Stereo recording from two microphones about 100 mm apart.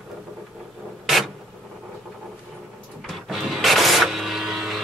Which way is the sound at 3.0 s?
Centre (ahead or behind).